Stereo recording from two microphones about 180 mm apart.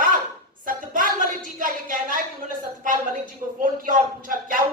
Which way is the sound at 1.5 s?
50° right (ahead or behind).